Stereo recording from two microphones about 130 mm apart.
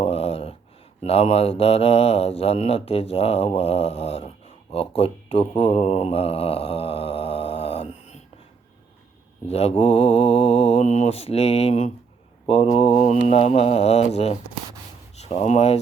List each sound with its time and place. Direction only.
0.0 s a sound: 50° left (ahead or behind)
1.0 s mantra: 50° left (ahead or behind)
9.5 s mantra: 55° left (ahead or behind)
15.2 s speech: 55° left (ahead or behind)